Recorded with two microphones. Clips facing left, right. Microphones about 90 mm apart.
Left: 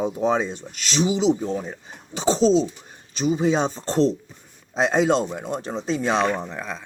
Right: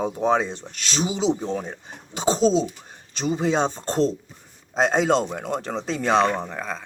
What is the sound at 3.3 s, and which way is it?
Speech, 55° right (ahead or behind).